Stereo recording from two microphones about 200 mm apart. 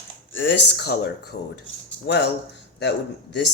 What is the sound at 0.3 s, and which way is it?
Speech, 60° left (ahead or behind).